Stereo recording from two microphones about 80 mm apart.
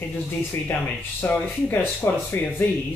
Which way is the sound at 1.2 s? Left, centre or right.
Left.